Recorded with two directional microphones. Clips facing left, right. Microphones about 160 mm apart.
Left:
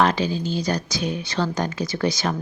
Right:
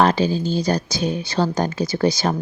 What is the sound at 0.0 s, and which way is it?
Speech, 35° right (ahead or behind).